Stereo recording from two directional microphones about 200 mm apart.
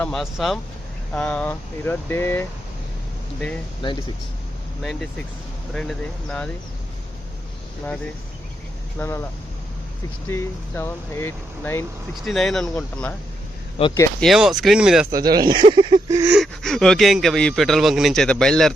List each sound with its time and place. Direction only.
0.0 s speech: centre (ahead or behind)
3.8 s speech: 20° left (ahead or behind)
4.8 s speech: centre (ahead or behind)
9.0 s speech: 15° left (ahead or behind)
10.2 s speech: 10° left (ahead or behind)
12.1 s speech: centre (ahead or behind)
13.8 s speech: 30° left (ahead or behind)
14.2 s speech: centre (ahead or behind)
15.1 s speech: 20° right (ahead or behind)
16.4 s speech: centre (ahead or behind)